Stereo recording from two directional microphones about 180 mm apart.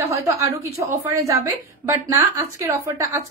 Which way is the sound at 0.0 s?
15° right (ahead or behind).